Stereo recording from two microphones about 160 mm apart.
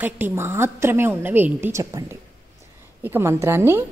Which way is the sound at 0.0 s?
15° right (ahead or behind).